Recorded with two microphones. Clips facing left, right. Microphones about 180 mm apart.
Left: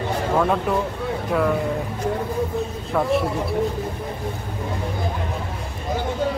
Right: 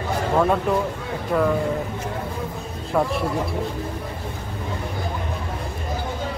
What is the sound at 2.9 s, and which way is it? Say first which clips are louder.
Speech: right 1 dB; 5° right (ahead or behind).